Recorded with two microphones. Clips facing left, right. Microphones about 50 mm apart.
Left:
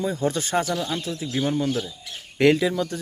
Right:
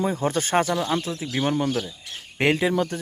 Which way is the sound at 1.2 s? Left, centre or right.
Right.